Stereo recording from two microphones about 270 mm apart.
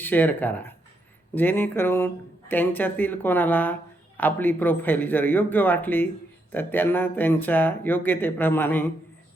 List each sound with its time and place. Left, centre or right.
0.0 s speech: centre